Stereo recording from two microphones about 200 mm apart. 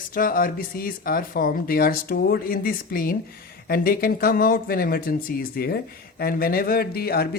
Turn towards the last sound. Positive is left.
turn(degrees=50)  # may be behind; listen again after turning